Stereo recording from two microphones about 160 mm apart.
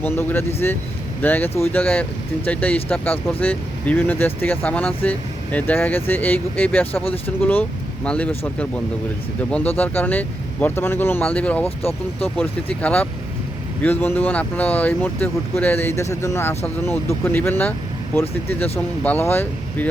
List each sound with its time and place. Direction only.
0.0 s speech: 15° left (ahead or behind)
6.9 s speech: 35° left (ahead or behind)
7.3 s speech: 10° left (ahead or behind)
9.5 s speech: 10° left (ahead or behind)